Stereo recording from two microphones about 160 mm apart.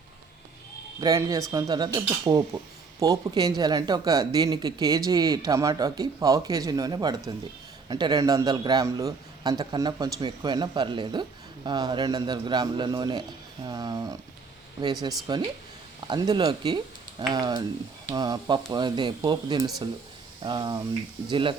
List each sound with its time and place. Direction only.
1.0 s a man's voice: 20° right (ahead or behind)
15.3 s a man's voice: 25° right (ahead or behind)